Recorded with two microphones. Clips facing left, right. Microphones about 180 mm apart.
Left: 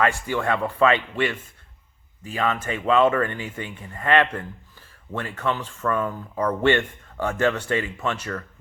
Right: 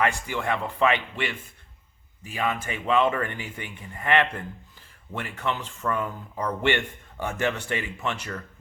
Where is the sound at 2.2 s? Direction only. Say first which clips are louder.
Left 3 dB; 10° right (ahead or behind).